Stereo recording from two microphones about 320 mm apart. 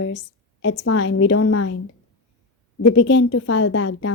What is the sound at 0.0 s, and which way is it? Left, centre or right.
A woman's voice, left.